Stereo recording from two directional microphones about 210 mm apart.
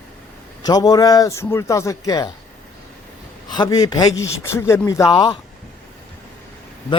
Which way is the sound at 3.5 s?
20° left (ahead or behind).